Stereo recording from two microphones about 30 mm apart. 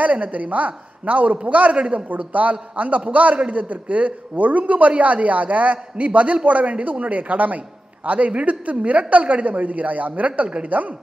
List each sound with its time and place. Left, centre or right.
0.0 s a woman's voice: right
2.0 s a woman's voice: right